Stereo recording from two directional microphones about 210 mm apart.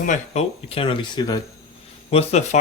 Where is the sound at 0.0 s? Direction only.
35° left (ahead or behind).